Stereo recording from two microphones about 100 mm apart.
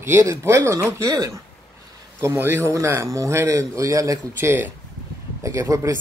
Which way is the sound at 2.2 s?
25° right (ahead or behind).